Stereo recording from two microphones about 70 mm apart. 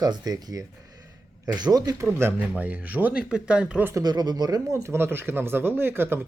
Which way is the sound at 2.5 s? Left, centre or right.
Right.